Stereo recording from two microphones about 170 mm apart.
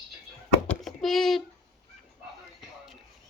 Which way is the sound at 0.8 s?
Centre (ahead or behind).